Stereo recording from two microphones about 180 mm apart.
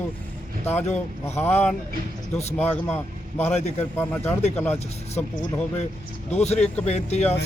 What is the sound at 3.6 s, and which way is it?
Speech, 35° left (ahead or behind).